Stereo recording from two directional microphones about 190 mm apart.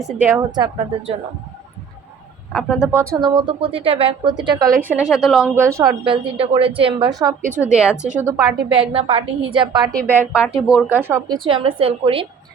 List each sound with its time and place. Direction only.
0.0 s a woman's voice: 10° right (ahead or behind)
2.5 s a woman's voice: centre (ahead or behind)
2.9 s speech: 15° right (ahead or behind)
5.5 s speech: 15° right (ahead or behind)
7.6 s a woman's voice: 5° right (ahead or behind)
8.7 s speech: 30° right (ahead or behind)
10.1 s a woman's voice: 10° right (ahead or behind)
11.3 s speech: 25° right (ahead or behind)